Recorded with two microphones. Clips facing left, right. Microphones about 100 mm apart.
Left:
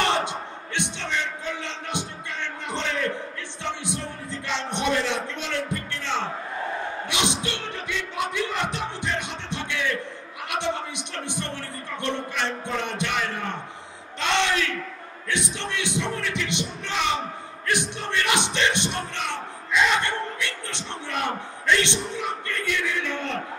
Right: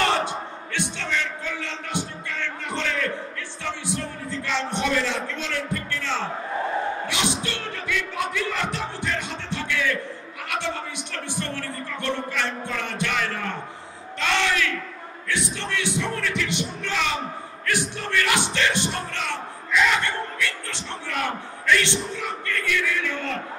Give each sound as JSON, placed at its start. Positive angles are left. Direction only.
{"t": 0.0, "sound": "a sound", "side_deg": 20}
{"t": 3.6, "sound": "music", "side_deg": 20}
{"t": 14.2, "sound": "bellow", "side_deg": 20}
{"t": 15.2, "sound": "music", "side_deg": 20}